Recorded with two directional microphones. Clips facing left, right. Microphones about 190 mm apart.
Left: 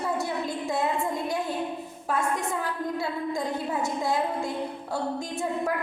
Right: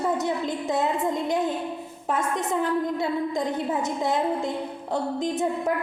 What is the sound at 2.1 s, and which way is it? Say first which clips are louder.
A woman's voice: right 2 dB; 20° right (ahead or behind).